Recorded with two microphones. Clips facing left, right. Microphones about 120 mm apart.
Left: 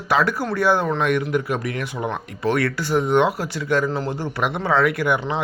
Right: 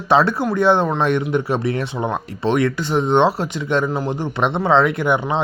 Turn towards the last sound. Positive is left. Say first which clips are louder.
# right 2 dB
turn(degrees=-25)  # may be behind; listen again after turning